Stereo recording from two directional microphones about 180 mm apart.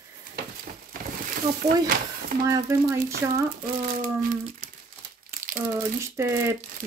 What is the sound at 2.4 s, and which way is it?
Speech, 15° right (ahead or behind).